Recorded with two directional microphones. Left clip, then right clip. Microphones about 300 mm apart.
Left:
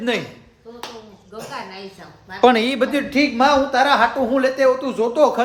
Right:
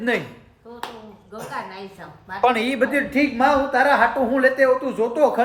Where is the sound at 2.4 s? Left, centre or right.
Left.